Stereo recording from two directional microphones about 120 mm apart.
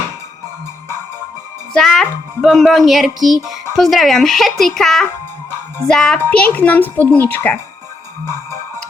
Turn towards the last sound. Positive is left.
turn(degrees=15)  # may be behind; listen again after turning